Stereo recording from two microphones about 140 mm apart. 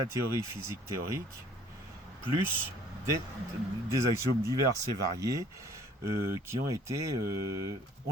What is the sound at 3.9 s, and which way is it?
Speech, 20° right (ahead or behind).